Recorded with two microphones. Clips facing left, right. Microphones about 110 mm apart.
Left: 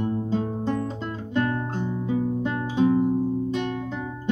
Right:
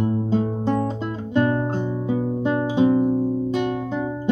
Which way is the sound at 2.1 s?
15° right (ahead or behind).